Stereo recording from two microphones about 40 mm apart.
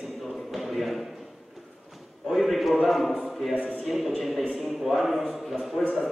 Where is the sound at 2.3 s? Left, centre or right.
Centre.